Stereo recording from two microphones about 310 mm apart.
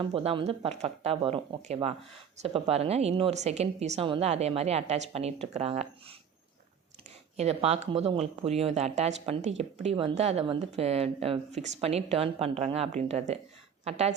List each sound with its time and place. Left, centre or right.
0.0 s speech: centre
7.3 s speech: centre